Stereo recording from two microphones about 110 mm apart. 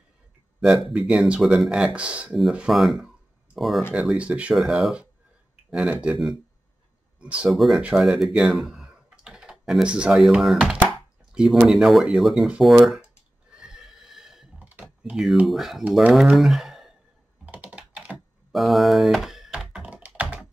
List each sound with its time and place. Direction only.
0.6 s speech: centre (ahead or behind)
7.2 s speech: 5° right (ahead or behind)
13.5 s neigh: 5° right (ahead or behind)
14.6 s computer keyboard: 15° right (ahead or behind)
15.4 s speech: centre (ahead or behind)
17.5 s computer keyboard: 10° right (ahead or behind)